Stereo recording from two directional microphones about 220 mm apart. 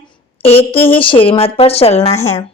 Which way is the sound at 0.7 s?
10° left (ahead or behind).